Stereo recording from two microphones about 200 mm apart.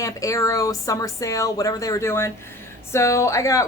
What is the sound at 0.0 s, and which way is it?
A woman's voice, 15° left (ahead or behind).